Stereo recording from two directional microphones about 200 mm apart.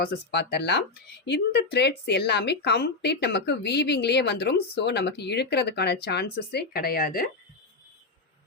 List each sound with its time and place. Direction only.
0.0 s speech: 55° left (ahead or behind)